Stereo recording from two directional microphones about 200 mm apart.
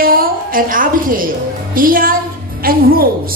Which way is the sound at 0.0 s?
45° right (ahead or behind).